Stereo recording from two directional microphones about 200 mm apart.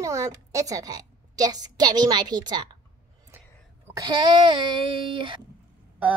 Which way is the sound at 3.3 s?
10° right (ahead or behind).